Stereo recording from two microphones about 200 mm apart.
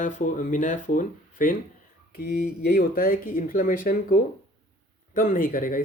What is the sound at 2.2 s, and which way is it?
Speech, 50° left (ahead or behind).